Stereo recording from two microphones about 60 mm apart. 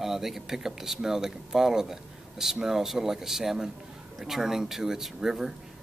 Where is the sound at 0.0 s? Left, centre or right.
Centre.